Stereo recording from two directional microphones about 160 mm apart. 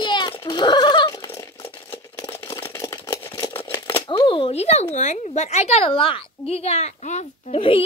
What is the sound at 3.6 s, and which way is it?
Scissors, 15° left (ahead or behind).